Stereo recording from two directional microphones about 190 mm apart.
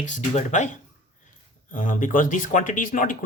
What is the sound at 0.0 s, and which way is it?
Speech, 40° left (ahead or behind).